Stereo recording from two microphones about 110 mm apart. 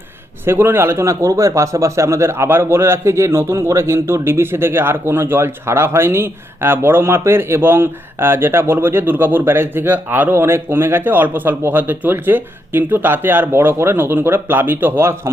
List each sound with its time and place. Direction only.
0.4 s a man's voice: 20° right (ahead or behind)